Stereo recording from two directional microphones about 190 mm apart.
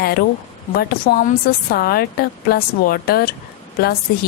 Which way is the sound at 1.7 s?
55° left (ahead or behind).